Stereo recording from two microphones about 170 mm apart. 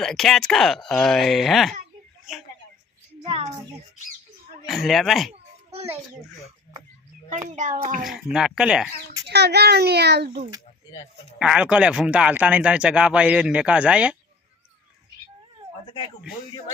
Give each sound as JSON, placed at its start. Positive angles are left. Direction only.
{"t": 0.0, "sound": "speech", "side_deg": 0}
{"t": 4.7, "sound": "speech", "side_deg": 0}
{"t": 5.3, "sound": "children playing", "side_deg": -35}
{"t": 7.3, "sound": "a child's voice", "side_deg": -50}
{"t": 8.0, "sound": "speech", "side_deg": -5}
{"t": 9.2, "sound": "a child's voice", "side_deg": -75}
{"t": 11.3, "sound": "speech", "side_deg": -5}